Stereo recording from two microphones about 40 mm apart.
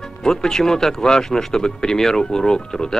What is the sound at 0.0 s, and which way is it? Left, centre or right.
Speech, centre.